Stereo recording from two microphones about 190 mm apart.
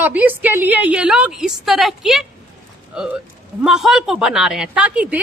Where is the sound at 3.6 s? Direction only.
Centre (ahead or behind).